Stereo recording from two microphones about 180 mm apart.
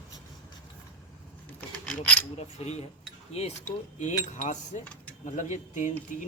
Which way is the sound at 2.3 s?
35° left (ahead or behind).